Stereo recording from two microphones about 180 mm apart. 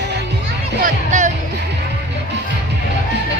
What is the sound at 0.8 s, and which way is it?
Music, 45° right (ahead or behind).